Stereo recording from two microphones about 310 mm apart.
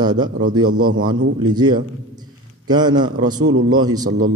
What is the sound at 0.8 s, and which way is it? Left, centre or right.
Speech, right.